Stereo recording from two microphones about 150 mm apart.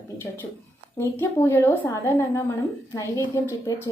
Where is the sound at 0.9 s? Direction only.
15° left (ahead or behind).